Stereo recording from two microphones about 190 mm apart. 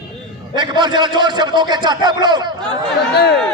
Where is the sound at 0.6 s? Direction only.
25° right (ahead or behind).